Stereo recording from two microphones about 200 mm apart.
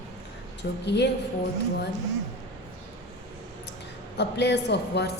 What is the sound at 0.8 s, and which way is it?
Speech, 60° left (ahead or behind).